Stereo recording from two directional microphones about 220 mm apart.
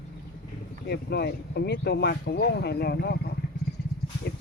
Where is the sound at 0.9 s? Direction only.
50° left (ahead or behind).